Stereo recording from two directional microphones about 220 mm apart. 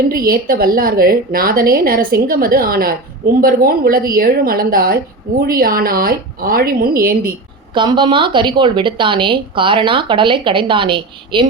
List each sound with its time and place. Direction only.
0.1 s a woman's voice: 40° right (ahead or behind)
7.7 s a woman's voice: 20° right (ahead or behind)